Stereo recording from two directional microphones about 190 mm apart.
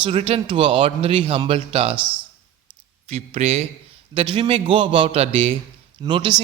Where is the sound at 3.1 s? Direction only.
35° right (ahead or behind).